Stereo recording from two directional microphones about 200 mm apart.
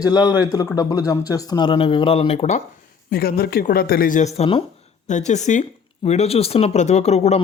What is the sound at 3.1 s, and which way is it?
Speech, 50° left (ahead or behind).